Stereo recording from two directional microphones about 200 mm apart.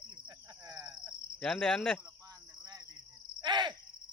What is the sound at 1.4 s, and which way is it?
Cricket, 5° left (ahead or behind).